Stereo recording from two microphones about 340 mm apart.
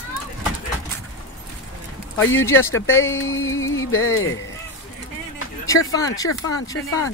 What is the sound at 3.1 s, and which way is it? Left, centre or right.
Speech, left.